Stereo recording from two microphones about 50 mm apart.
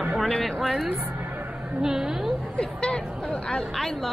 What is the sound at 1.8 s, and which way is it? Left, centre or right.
Speech, centre.